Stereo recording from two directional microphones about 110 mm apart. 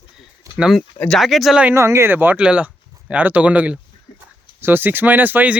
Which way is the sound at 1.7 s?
25° right (ahead or behind).